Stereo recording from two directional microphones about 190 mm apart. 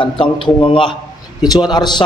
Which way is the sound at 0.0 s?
25° left (ahead or behind).